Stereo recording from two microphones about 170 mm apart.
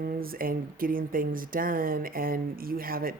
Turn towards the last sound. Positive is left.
turn(degrees=-60)  # may be behind; listen again after turning